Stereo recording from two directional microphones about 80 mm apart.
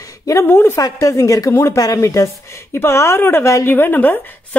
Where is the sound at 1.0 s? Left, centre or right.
Left.